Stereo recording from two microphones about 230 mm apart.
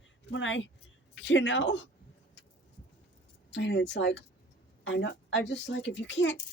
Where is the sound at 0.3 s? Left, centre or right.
Left.